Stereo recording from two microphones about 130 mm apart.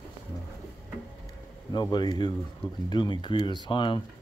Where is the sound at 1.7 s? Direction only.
35° left (ahead or behind).